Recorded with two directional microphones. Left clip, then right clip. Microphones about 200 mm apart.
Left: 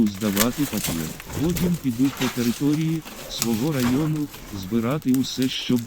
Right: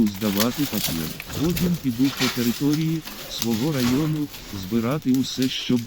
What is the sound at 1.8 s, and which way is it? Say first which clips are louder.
Speech: right 2 dB; centre (ahead or behind).